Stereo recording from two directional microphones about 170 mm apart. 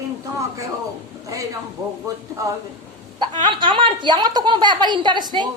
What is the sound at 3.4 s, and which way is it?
A woman's voice, 30° right (ahead or behind).